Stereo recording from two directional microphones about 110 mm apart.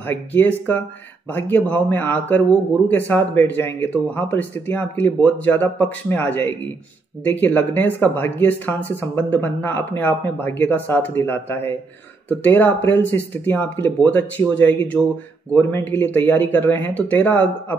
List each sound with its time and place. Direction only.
0.0 s speech: 15° left (ahead or behind)